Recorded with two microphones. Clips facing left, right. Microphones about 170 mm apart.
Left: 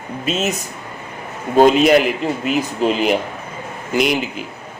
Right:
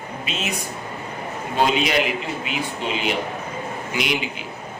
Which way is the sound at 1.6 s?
45° left (ahead or behind).